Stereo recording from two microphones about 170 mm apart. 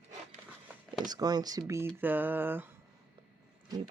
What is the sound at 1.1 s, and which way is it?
Speech, 25° right (ahead or behind).